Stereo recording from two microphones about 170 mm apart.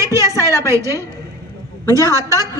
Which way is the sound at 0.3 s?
15° left (ahead or behind).